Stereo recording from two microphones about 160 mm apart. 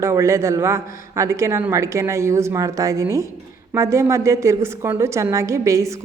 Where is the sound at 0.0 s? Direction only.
15° right (ahead or behind).